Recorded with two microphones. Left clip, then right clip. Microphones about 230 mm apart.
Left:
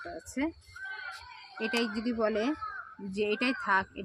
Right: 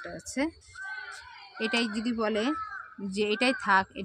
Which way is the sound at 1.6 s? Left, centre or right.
Right.